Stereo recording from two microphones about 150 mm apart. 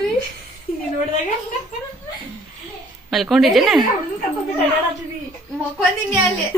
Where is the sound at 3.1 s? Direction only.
Centre (ahead or behind).